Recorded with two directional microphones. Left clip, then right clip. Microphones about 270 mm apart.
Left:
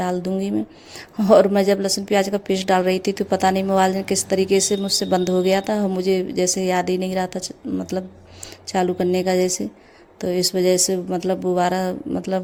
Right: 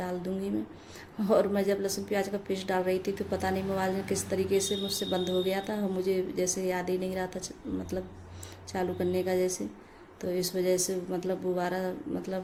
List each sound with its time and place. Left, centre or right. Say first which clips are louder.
0.0 s a woman's voice: left 11 dB; left